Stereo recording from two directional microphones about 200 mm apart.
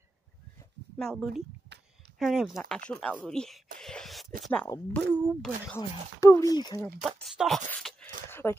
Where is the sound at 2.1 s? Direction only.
Centre (ahead or behind).